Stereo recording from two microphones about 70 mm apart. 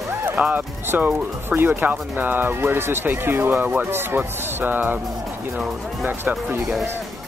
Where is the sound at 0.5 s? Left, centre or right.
Right.